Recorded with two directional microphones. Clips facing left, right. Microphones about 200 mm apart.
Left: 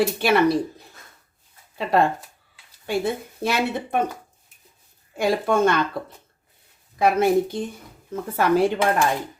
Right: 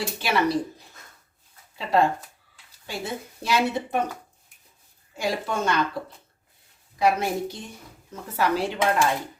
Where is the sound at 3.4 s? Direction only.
55° left (ahead or behind).